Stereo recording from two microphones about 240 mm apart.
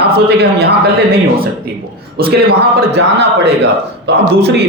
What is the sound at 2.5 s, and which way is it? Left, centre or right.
A man's voice, right.